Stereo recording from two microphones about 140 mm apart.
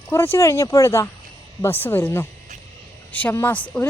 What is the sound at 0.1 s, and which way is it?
A woman's voice, 20° left (ahead or behind).